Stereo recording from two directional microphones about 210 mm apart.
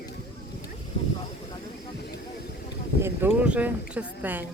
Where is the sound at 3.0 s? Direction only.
10° right (ahead or behind).